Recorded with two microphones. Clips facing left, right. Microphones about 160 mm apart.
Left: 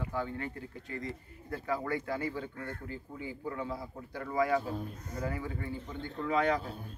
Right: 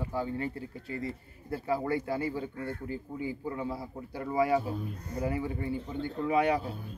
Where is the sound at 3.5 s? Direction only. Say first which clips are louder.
Right 2 dB; 10° right (ahead or behind).